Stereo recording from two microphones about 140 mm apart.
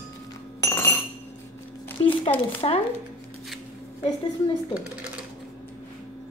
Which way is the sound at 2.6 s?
40° left (ahead or behind).